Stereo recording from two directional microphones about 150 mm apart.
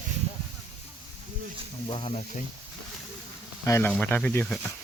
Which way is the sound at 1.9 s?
40° left (ahead or behind).